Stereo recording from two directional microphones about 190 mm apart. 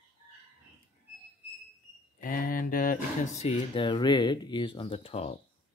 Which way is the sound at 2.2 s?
50° left (ahead or behind).